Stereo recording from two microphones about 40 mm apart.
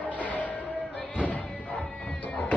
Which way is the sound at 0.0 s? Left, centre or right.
Left.